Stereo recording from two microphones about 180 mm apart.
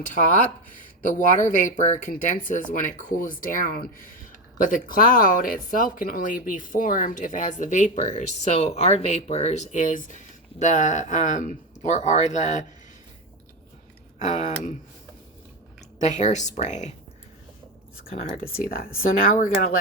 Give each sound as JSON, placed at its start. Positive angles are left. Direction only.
{"t": 0.0, "sound": "speech", "side_deg": 45}
{"t": 14.2, "sound": "a woman's voice", "side_deg": 40}
{"t": 16.0, "sound": "a woman's voice", "side_deg": 40}
{"t": 18.4, "sound": "speech", "side_deg": 55}